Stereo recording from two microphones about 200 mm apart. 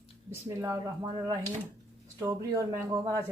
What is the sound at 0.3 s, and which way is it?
Speech, 15° right (ahead or behind).